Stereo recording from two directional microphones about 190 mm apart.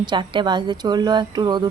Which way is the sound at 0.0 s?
25° right (ahead or behind).